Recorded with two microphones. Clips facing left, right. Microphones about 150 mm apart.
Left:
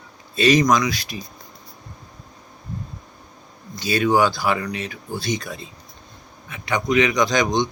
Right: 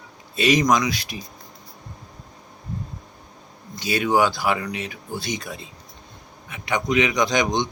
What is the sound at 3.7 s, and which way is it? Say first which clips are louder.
Speech: left 2 dB; 15° right (ahead or behind).